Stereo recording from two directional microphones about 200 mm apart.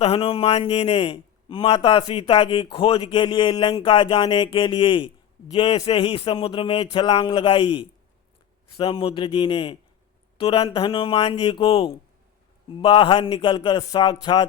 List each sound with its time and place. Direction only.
0.0 s a man's voice: 30° left (ahead or behind)